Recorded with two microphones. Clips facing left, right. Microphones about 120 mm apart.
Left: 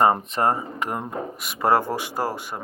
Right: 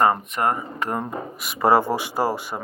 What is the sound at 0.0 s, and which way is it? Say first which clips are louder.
Speech: left 1 dB; 30° left (ahead or behind).